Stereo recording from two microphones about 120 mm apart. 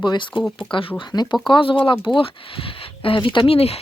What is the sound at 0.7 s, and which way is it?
Speech, 45° left (ahead or behind).